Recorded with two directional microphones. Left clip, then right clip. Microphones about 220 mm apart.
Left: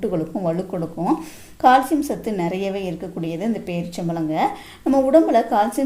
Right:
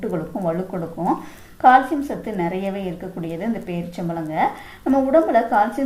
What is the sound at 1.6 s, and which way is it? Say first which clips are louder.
A woman's voice: right 1 dB; 45° left (ahead or behind).